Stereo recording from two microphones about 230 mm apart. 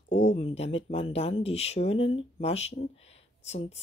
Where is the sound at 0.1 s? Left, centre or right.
Left.